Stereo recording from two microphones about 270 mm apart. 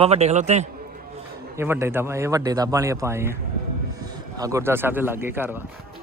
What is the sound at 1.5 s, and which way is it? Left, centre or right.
Speech, centre.